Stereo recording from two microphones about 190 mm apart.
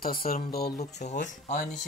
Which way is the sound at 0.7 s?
40° left (ahead or behind).